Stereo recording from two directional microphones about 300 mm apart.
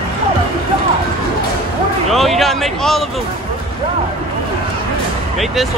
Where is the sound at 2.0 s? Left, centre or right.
Centre.